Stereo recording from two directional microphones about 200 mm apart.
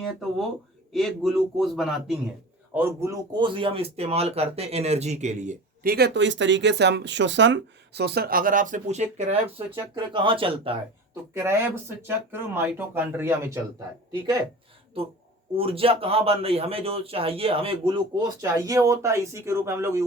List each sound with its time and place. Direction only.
0.0 s a man's voice: centre (ahead or behind)
2.7 s speech: 15° right (ahead or behind)
11.3 s speech: 10° right (ahead or behind)
15.5 s speech: 30° right (ahead or behind)